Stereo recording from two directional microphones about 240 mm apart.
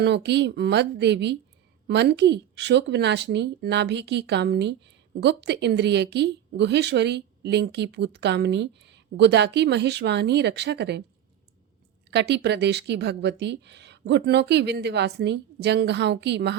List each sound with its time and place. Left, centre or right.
0.0 s a woman's voice: right
12.1 s a woman's voice: right